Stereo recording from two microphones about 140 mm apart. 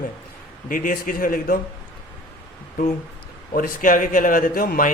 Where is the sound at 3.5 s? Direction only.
90° left.